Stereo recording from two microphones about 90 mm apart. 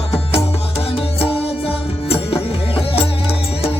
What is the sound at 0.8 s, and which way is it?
Music, 90° left.